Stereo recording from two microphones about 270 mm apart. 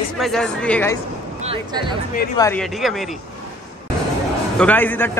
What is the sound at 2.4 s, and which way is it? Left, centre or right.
Speech, centre.